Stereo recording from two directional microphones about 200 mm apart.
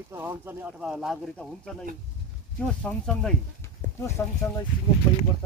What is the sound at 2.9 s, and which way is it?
Speech, 10° left (ahead or behind).